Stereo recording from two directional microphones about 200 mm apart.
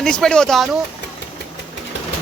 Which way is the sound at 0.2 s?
5° left (ahead or behind).